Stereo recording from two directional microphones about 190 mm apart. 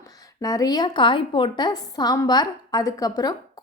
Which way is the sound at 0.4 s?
20° left (ahead or behind).